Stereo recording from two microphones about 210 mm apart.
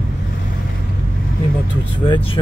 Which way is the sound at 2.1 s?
25° left (ahead or behind).